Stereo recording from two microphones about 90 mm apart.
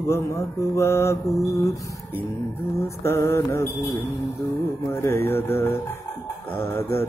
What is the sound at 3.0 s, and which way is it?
Mantra, 30° left (ahead or behind).